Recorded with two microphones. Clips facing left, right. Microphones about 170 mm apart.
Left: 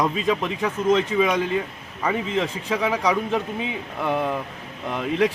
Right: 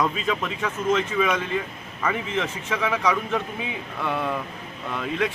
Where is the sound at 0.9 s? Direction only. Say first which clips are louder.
Left 3 dB; 35° left (ahead or behind).